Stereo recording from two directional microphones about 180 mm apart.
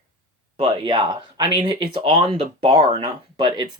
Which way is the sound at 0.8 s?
25° right (ahead or behind).